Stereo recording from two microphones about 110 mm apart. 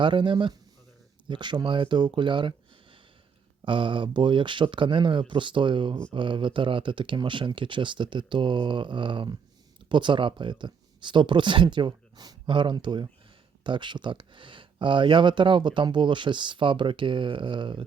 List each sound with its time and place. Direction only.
0.0 s speech: 45° right (ahead or behind)